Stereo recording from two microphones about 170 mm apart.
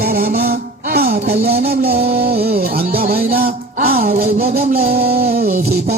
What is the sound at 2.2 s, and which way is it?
Music, 65° right (ahead or behind).